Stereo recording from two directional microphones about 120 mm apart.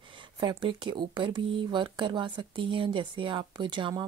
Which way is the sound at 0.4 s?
45° right (ahead or behind).